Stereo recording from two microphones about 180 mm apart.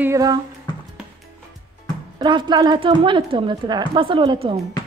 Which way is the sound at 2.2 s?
25° right (ahead or behind).